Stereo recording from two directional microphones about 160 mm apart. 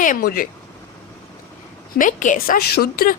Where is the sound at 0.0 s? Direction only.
60° left (ahead or behind).